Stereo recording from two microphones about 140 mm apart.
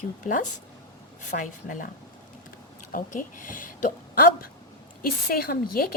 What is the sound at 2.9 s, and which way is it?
Speech, 75° left (ahead or behind).